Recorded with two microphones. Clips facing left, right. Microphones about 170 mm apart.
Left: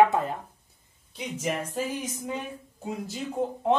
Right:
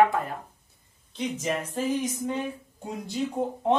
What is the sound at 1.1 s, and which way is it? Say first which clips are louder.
Speech: right 2 dB; 10° left (ahead or behind).